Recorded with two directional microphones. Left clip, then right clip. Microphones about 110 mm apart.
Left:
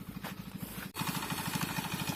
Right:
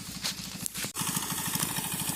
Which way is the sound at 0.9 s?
45° right (ahead or behind).